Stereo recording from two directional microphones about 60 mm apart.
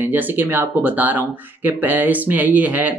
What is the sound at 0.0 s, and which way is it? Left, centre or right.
Speech, right.